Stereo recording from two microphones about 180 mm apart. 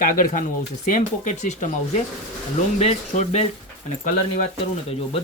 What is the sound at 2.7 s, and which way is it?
Speech, 35° left (ahead or behind).